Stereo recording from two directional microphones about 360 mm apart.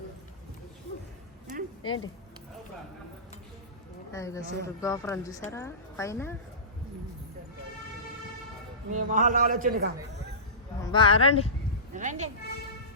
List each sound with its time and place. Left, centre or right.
1.8 s speech: left
4.1 s a woman's voice: centre
8.9 s a man's voice: right
10.9 s a woman's voice: centre
11.9 s a man's voice: centre